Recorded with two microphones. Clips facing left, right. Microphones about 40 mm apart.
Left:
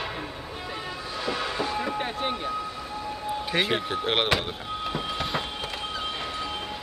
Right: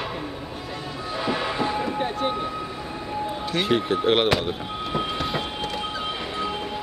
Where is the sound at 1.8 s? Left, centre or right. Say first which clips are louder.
Right 3 dB; centre.